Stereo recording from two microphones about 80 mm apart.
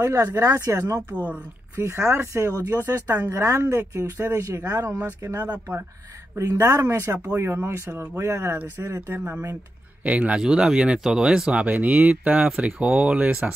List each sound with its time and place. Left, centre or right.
0.0 s speech: right
5.4 s speech: right
6.3 s speech: right
7.9 s speech: centre
8.2 s speech: right
10.0 s speech: centre
11.7 s speech: right